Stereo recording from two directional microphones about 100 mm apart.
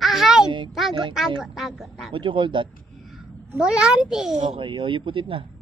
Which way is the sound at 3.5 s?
10° right (ahead or behind).